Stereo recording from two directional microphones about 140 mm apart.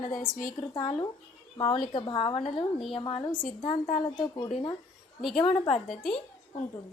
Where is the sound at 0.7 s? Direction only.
40° left (ahead or behind).